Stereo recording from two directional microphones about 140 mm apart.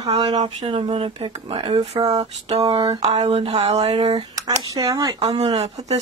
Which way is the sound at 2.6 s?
35° right (ahead or behind).